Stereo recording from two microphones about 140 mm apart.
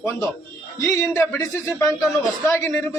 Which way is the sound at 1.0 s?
20° left (ahead or behind).